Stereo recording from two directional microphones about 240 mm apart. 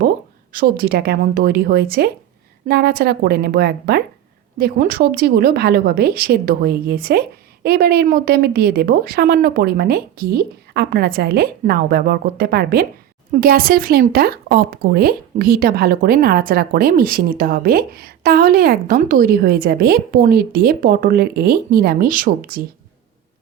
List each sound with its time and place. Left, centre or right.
0.5 s speech: right